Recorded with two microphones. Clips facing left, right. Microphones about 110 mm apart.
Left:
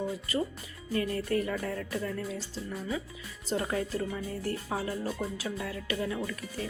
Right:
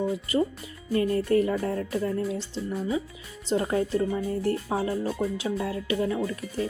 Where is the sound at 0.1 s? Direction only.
30° right (ahead or behind).